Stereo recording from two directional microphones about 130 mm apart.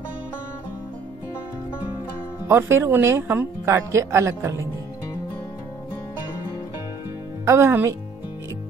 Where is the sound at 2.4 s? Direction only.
20° right (ahead or behind).